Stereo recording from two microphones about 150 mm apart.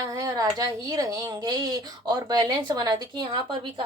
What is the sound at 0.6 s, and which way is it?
Speech, 25° right (ahead or behind).